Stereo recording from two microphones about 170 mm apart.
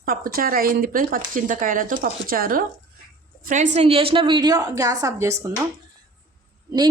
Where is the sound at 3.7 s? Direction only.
35° right (ahead or behind); by 5.5 s 15° right (ahead or behind).